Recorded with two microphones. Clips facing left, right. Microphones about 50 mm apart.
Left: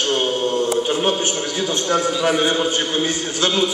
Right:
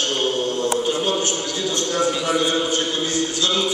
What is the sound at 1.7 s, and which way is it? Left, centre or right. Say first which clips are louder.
A man's voice: left 1 dB; left.